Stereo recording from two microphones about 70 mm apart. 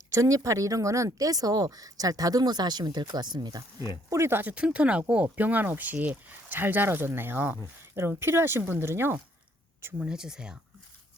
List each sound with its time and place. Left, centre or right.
0.1 s speech: right
3.8 s speech: right
4.3 s speech: right
4.5 s speech: centre; by 9.1 s right
10.0 s speech: centre